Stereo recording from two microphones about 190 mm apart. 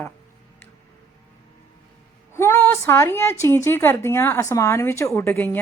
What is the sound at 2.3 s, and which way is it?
A woman's voice, 15° left (ahead or behind).